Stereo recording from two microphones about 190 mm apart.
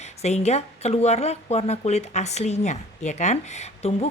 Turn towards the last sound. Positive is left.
turn(degrees=35)  # may be behind; listen again after turning